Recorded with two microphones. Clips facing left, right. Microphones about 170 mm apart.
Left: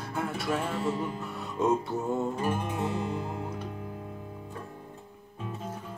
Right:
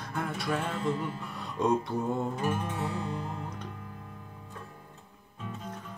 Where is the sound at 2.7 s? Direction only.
15° left (ahead or behind).